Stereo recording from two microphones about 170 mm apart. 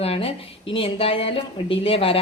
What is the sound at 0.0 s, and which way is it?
Speech, 35° left (ahead or behind).